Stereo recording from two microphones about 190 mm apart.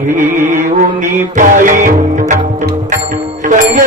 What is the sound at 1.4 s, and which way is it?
Music, 45° right (ahead or behind).